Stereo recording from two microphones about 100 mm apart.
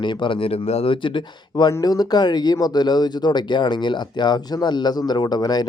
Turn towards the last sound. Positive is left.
turn(degrees=40)  # may be behind; listen again after turning